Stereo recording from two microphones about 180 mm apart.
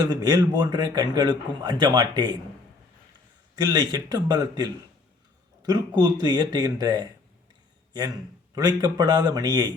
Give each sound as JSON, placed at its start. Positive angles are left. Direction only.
{"t": 0.1, "sound": "speech", "side_deg": -20}
{"t": 3.5, "sound": "speech", "side_deg": -25}
{"t": 8.5, "sound": "speech", "side_deg": -20}